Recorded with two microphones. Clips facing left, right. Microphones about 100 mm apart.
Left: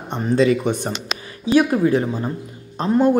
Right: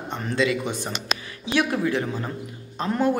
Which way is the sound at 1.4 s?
40° left (ahead or behind).